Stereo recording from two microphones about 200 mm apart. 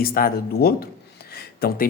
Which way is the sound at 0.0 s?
45° left (ahead or behind).